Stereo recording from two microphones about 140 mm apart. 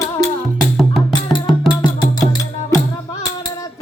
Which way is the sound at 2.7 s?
25° left (ahead or behind).